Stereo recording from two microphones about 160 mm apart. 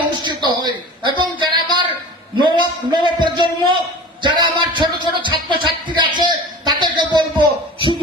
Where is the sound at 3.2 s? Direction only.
30° right (ahead or behind).